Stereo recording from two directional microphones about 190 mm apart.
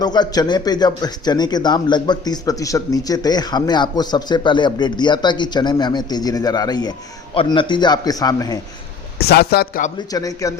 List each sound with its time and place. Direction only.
0.0 s speech: 20° left (ahead or behind)
9.1 s speech: 55° left (ahead or behind)
10.1 s speech: 20° left (ahead or behind)